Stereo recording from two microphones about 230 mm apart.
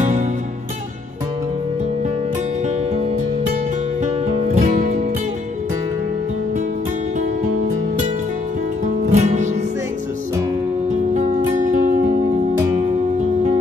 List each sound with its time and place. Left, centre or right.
4.0 s music: right
9.1 s music: right
11.1 s music: right